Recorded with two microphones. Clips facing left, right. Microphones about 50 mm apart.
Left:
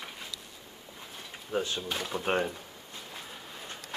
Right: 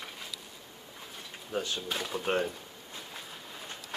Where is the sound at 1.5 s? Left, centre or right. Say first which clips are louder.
Left 2 dB; centre.